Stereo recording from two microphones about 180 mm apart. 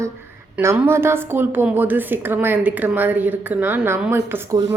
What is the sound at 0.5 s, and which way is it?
A woman's voice, 15° right (ahead or behind).